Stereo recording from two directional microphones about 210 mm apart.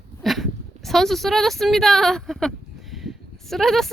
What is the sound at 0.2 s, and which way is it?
Speech, centre (ahead or behind).